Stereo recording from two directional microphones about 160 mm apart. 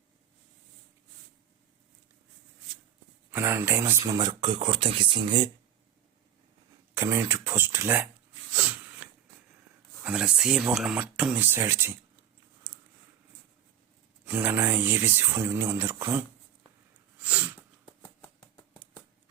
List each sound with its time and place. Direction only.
3.3 s speech: 15° right (ahead or behind); by 5.5 s 30° right (ahead or behind)
6.9 s speech: 15° right (ahead or behind)
9.0 s a sound: 10° right (ahead or behind)
10.0 s speech: 5° right (ahead or behind)
14.3 s speech: 10° right (ahead or behind)
17.2 s sneeze: 10° right (ahead or behind)